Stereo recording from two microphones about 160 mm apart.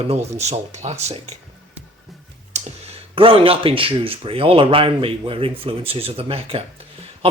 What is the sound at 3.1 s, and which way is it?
Speech, 35° right (ahead or behind).